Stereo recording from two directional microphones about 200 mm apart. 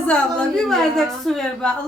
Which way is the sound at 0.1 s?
5° left (ahead or behind).